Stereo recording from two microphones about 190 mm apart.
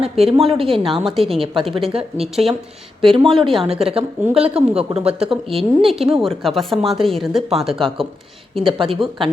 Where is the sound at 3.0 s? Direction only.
25° right (ahead or behind).